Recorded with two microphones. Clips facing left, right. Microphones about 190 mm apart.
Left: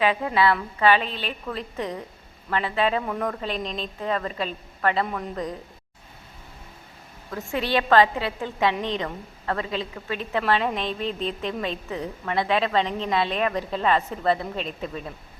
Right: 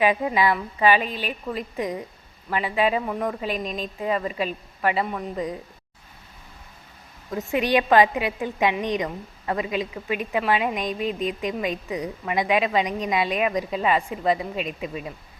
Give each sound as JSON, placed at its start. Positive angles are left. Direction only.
{"t": 0.0, "sound": "a woman's voice", "side_deg": -15}
{"t": 7.3, "sound": "a woman's voice", "side_deg": -20}